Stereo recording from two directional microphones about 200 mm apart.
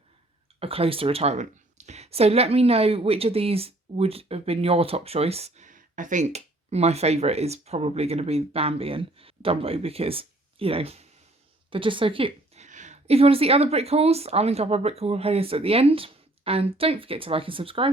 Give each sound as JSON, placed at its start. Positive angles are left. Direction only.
{"t": 0.6, "sound": "a woman's voice", "side_deg": -30}